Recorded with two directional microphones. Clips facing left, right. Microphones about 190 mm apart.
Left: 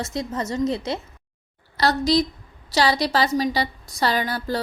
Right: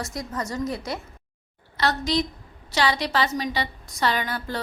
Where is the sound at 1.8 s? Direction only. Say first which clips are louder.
Left 4 dB; 35° left (ahead or behind).